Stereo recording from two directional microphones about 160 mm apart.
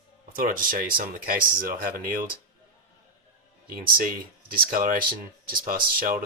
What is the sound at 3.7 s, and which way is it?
Speech, 65° right (ahead or behind).